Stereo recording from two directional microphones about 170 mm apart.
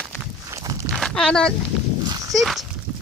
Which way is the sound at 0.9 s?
5° left (ahead or behind).